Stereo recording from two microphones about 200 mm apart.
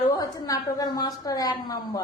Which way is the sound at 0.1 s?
15° left (ahead or behind).